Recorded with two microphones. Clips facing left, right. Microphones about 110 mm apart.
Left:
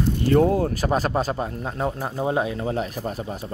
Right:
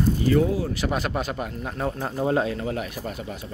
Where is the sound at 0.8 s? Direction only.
35° left (ahead or behind); by 2.6 s 20° left (ahead or behind).